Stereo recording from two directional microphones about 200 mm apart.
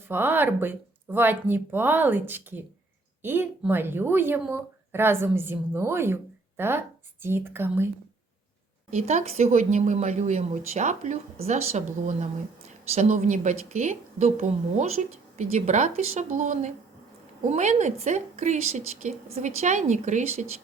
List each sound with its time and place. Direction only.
0.1 s a woman's voice: 10° right (ahead or behind)
8.9 s speech: 35° right (ahead or behind)